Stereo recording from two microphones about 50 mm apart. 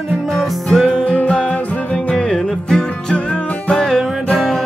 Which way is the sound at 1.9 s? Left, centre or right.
Centre.